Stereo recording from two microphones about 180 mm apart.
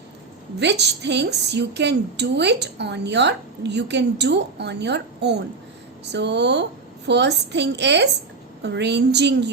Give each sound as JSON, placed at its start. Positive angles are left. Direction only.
{"t": 0.6, "sound": "a woman's voice", "side_deg": -70}